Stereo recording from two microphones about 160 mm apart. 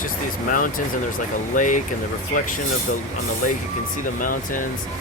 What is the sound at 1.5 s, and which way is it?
Speech, 55° left (ahead or behind).